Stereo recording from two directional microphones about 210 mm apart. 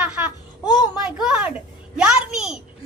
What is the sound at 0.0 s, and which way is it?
Babbling, 5° right (ahead or behind).